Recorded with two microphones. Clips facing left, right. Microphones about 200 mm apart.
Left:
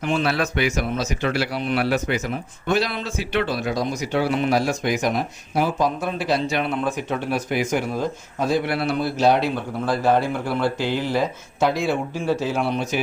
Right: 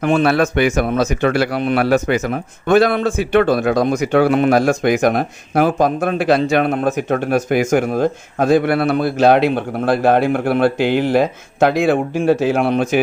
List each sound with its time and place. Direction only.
0.0 s a man's voice: 55° right (ahead or behind)